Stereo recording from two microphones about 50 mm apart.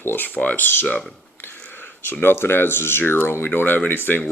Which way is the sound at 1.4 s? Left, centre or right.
Left.